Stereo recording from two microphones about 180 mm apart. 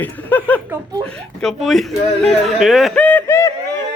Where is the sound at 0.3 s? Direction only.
10° left (ahead or behind).